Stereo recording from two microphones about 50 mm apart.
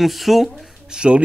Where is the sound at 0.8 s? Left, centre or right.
Centre.